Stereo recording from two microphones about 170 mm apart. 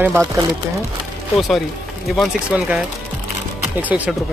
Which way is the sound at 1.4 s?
Centre (ahead or behind).